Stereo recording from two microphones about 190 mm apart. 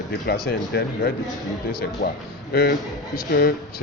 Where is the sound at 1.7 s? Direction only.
55° left (ahead or behind).